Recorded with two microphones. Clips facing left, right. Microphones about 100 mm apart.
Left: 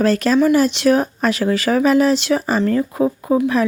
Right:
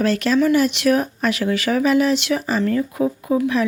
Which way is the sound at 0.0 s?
40° left (ahead or behind).